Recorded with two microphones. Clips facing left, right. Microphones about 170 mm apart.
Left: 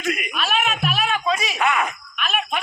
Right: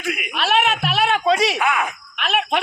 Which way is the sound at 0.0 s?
5° right (ahead or behind).